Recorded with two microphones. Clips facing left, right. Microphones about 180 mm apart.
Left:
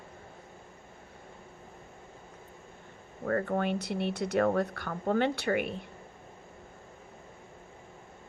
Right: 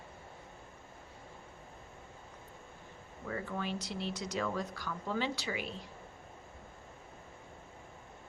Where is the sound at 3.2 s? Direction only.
60° left (ahead or behind).